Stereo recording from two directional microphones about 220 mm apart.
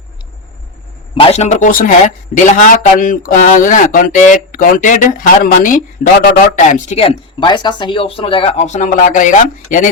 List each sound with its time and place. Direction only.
1.1 s a man's voice: 25° left (ahead or behind)